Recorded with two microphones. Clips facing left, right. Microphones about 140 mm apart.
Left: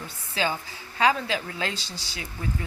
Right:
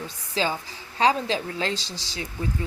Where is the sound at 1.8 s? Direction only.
90° right.